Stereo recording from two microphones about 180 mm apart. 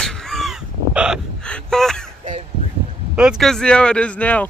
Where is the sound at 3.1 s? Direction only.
5° right (ahead or behind).